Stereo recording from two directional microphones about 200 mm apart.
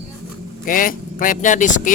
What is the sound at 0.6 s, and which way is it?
Speech, 45° left (ahead or behind).